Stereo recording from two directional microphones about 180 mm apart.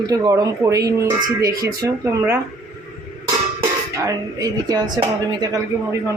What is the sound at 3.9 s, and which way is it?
Speech, 15° right (ahead or behind).